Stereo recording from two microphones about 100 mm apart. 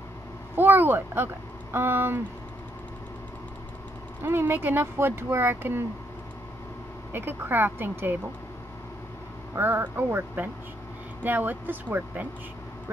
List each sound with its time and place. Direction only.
0.6 s speech: 20° right (ahead or behind)
4.2 s speech: 20° right (ahead or behind)
7.1 s speech: 20° right (ahead or behind)
9.6 s speech: 20° right (ahead or behind)